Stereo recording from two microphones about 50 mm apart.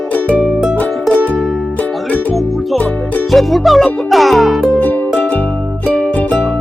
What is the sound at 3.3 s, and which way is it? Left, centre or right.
Music, centre.